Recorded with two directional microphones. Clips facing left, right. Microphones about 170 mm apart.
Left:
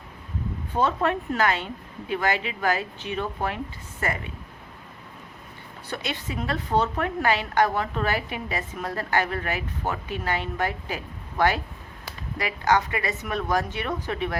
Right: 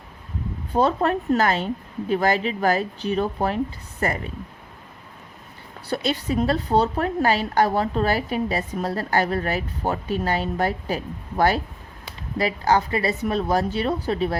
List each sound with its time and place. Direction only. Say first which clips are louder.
0.7 s a woman's voice: right 4 dB; 40° right (ahead or behind)
5.9 s a woman's voice: right 8 dB; 35° right (ahead or behind)